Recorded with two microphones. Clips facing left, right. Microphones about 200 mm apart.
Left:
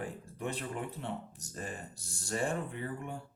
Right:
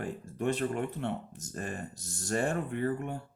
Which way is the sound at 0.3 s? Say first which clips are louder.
Right 8 dB; 65° right (ahead or behind).